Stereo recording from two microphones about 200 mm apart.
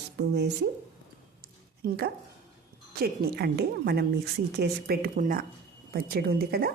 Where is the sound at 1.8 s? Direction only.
50° right (ahead or behind).